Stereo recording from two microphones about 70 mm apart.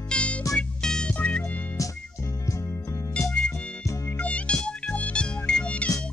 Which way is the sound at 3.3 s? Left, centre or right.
Centre.